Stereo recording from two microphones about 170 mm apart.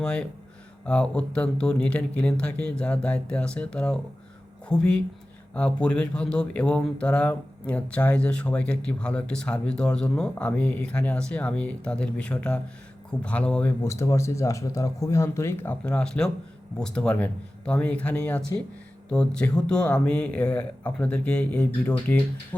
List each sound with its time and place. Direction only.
0.0 s a man's voice: 5° left (ahead or behind)